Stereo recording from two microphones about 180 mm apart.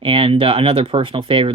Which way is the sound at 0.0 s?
30° right (ahead or behind).